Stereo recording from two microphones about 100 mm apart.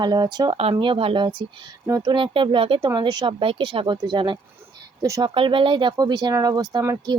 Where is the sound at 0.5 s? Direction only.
80° right.